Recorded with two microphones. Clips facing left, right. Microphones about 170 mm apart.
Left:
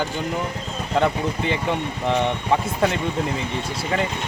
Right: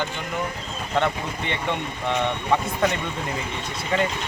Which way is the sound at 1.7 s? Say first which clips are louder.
Left 3 dB; 35° left (ahead or behind).